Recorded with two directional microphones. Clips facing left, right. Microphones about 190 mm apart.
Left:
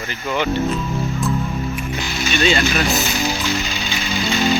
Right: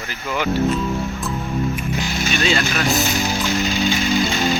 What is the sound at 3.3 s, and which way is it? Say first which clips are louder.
Music: right 3 dB; 50° right (ahead or behind).